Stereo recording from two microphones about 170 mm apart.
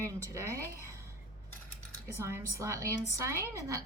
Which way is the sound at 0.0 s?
15° right (ahead or behind).